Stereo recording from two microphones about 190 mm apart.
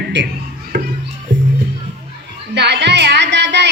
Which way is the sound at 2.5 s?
60° right (ahead or behind).